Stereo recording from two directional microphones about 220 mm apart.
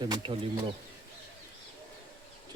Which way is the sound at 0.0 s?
20° right (ahead or behind).